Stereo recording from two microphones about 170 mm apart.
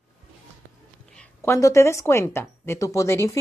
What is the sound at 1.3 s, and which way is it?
Speech, 20° left (ahead or behind).